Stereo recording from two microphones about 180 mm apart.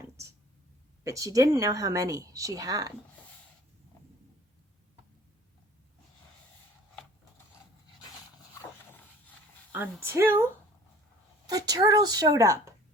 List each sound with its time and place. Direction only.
1.0 s speech: 20° right (ahead or behind)
9.7 s speech: 10° right (ahead or behind)
11.4 s speech: 20° right (ahead or behind)